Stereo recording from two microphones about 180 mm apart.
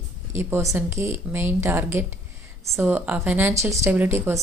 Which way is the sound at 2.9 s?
10° right (ahead or behind).